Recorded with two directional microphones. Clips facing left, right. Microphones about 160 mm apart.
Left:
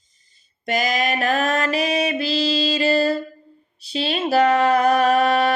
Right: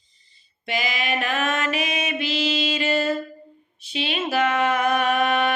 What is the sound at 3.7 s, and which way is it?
Mantra, 35° left (ahead or behind).